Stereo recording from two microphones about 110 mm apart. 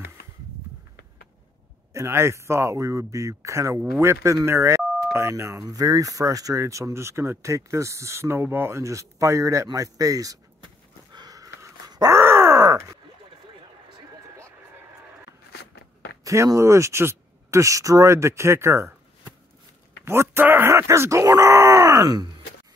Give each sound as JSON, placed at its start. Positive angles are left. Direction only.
{"t": 2.0, "sound": "speech", "side_deg": -25}
{"t": 11.1, "sound": "a sound", "side_deg": -35}
{"t": 12.2, "sound": "groan", "side_deg": -25}
{"t": 16.3, "sound": "speech", "side_deg": -30}